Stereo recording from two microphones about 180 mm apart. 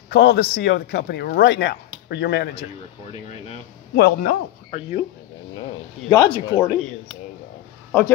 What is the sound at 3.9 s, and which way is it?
Speech, 55° left (ahead or behind).